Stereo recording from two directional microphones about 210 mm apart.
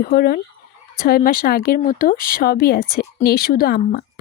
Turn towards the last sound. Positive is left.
turn(degrees=45)  # may be behind; listen again after turning